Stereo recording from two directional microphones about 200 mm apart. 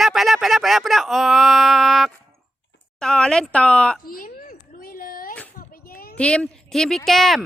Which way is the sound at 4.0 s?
45° left (ahead or behind).